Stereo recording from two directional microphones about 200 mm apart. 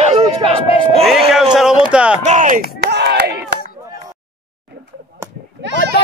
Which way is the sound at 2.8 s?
55° right (ahead or behind).